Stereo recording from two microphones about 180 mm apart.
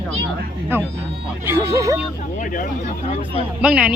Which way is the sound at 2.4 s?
45° left (ahead or behind).